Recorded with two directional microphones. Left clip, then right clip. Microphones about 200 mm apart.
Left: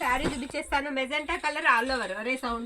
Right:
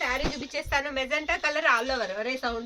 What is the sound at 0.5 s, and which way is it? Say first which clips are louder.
Speech: right 2 dB; 45° right (ahead or behind).